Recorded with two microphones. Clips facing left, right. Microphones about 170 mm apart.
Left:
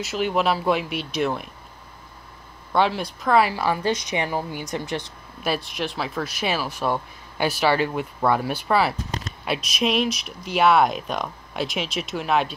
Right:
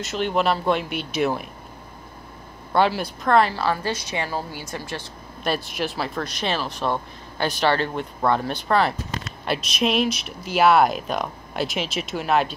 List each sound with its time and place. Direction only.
0.0 s speech: centre (ahead or behind)
2.7 s speech: centre (ahead or behind); by 5.1 s 20° left (ahead or behind)
5.4 s speech: centre (ahead or behind)